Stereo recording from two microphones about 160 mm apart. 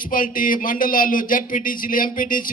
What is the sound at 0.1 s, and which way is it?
Speech, 60° left (ahead or behind).